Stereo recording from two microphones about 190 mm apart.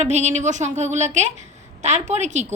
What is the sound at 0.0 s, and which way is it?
A woman's voice, 35° right (ahead or behind).